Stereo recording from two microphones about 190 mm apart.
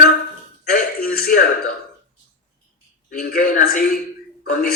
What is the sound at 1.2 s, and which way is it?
Speech, 50° left (ahead or behind).